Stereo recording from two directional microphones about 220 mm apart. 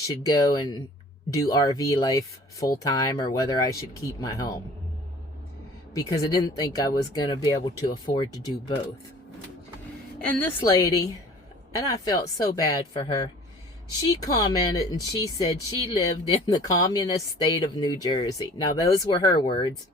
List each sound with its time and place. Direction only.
0.1 s speech: 15° left (ahead or behind)
5.9 s speech: 15° left (ahead or behind)
10.2 s speech: 5° left (ahead or behind)
10.6 s speech: 15° left (ahead or behind)